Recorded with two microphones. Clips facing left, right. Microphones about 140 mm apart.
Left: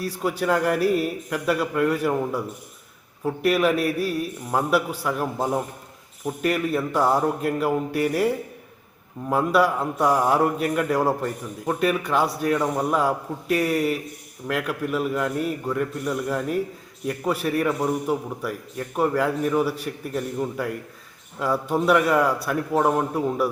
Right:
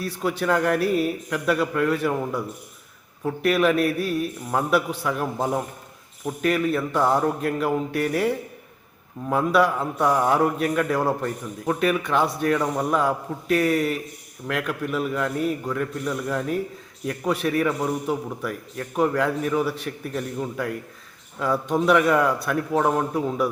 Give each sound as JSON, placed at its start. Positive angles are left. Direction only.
{"t": 0.0, "sound": "a man's voice", "side_deg": 10}
{"t": 9.3, "sound": "a man's voice", "side_deg": 5}